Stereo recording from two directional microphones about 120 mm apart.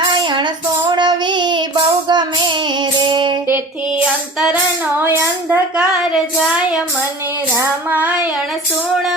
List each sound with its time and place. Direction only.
0.0 s child singing: 40° right (ahead or behind)
3.5 s child singing: 10° right (ahead or behind)
4.9 s a sound: 15° right (ahead or behind)
7.9 s child singing: 10° right (ahead or behind)